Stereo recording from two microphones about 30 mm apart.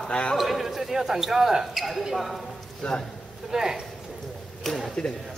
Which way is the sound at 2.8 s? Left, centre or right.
Left.